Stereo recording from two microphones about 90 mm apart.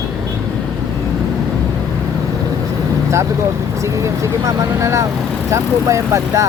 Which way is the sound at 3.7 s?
35° right (ahead or behind).